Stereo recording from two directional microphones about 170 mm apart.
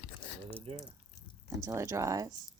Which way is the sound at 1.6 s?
15° right (ahead or behind).